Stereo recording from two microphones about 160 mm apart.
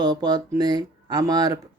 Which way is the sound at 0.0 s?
25° right (ahead or behind).